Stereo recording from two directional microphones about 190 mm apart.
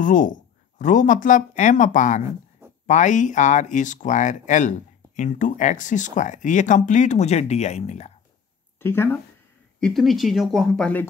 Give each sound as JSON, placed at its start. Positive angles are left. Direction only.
{"t": 0.0, "sound": "speech", "side_deg": 45}
{"t": 8.7, "sound": "speech", "side_deg": 10}
{"t": 9.8, "sound": "speech", "side_deg": 0}